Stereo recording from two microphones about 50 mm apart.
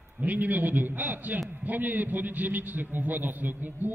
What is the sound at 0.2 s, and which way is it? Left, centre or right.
A man's voice, right.